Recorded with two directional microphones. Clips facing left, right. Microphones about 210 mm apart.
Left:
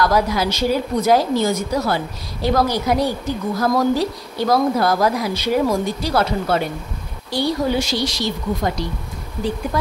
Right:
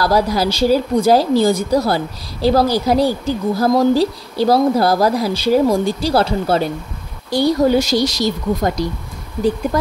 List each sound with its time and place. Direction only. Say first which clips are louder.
0.0 s speech: right 2 dB; 35° right (ahead or behind)
7.2 s speech: right 6 dB; 45° right (ahead or behind)